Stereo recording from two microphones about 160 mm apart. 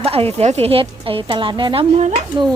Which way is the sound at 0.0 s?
35° right (ahead or behind).